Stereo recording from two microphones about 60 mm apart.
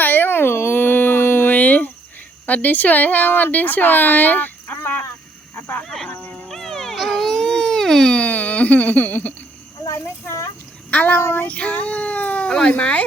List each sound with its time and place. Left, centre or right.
0.0 s a sound: left
2.5 s speech: left
6.5 s baby cry: centre
8.1 s a sound: left
10.9 s speech: left
11.3 s speech: left